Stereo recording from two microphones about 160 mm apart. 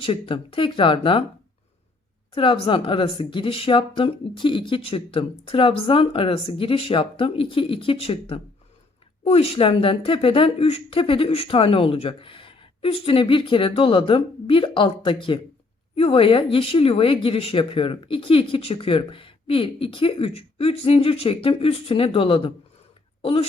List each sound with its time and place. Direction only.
0.0 s speech: 35° left (ahead or behind)
2.3 s speech: 30° left (ahead or behind)